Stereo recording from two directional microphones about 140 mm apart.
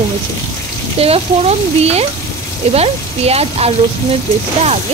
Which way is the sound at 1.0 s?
45° right (ahead or behind).